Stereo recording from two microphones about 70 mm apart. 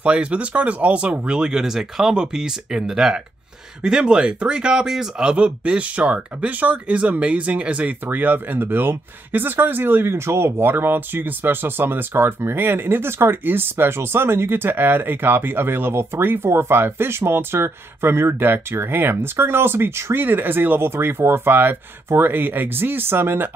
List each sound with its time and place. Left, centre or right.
0.0 s speech: centre